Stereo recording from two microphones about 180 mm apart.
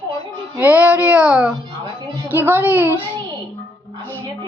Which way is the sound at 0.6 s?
10° right (ahead or behind).